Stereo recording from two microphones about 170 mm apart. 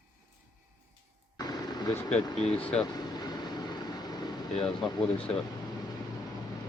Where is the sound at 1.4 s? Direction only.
25° left (ahead or behind).